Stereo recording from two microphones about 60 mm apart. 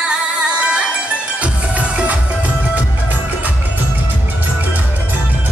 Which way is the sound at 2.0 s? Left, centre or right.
Right.